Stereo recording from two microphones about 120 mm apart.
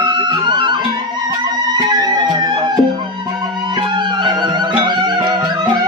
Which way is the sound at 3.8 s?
40° right (ahead or behind).